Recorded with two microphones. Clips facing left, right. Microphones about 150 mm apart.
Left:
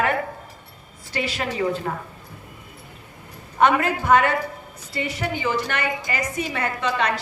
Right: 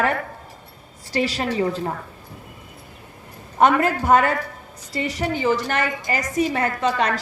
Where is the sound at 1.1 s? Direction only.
35° right (ahead or behind).